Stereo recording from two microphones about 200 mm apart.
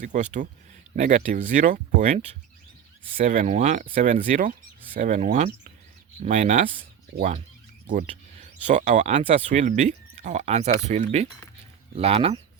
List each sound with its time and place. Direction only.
0.0 s speech: 40° right (ahead or behind)
8.6 s speech: 40° right (ahead or behind)